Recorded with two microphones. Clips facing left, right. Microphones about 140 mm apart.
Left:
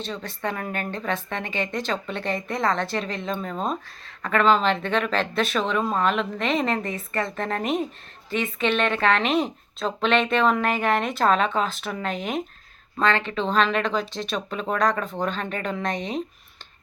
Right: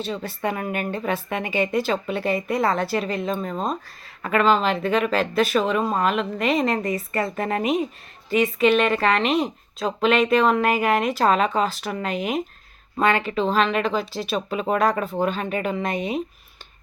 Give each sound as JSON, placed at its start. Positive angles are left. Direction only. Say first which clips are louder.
{"t": 0.0, "sound": "speech", "louder": "right 3 dB", "side_deg": -10}